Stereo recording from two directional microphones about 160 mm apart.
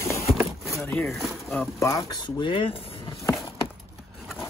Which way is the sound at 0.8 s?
10° left (ahead or behind).